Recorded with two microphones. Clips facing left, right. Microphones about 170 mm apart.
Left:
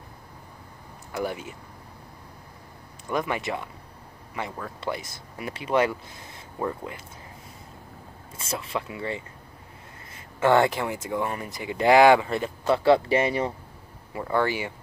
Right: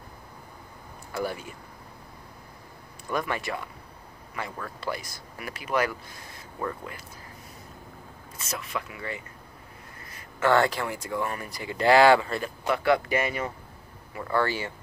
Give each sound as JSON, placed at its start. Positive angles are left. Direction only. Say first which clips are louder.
{"t": 1.1, "sound": "speech", "louder": "left 1 dB", "side_deg": 20}
{"t": 3.1, "sound": "speech", "louder": "left 2 dB", "side_deg": 20}
{"t": 8.4, "sound": "speech", "louder": "left 3 dB", "side_deg": 30}
{"t": 14.2, "sound": "speech", "louder": "left 2 dB", "side_deg": 15}